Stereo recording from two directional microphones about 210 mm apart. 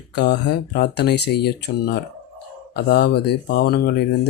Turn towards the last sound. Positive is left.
turn(degrees=50)  # may be behind; listen again after turning